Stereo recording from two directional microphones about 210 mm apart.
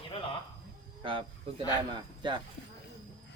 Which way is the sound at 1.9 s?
20° right (ahead or behind).